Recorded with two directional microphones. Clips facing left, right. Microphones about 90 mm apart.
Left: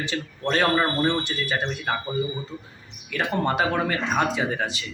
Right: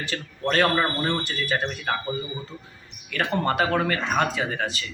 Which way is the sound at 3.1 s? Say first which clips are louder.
Even; 15° left (ahead or behind).